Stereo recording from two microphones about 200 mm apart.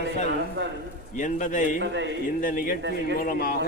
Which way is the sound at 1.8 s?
60° right (ahead or behind).